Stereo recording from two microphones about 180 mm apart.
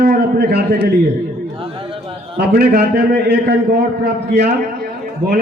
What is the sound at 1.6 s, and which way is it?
Chatter, 30° right (ahead or behind).